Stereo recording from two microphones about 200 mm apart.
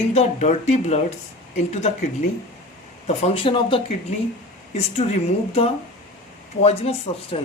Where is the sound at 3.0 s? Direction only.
30° left (ahead or behind).